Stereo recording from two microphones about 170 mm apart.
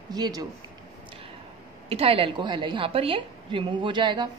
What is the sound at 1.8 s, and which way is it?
A woman's voice, 35° right (ahead or behind).